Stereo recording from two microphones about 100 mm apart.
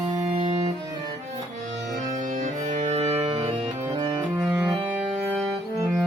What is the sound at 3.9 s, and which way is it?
Music, 45° right (ahead or behind).